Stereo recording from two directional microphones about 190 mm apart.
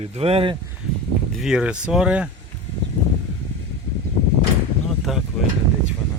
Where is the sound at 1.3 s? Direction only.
Centre (ahead or behind).